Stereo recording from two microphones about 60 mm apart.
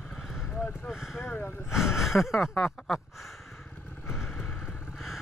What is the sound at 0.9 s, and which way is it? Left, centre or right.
Speech, centre.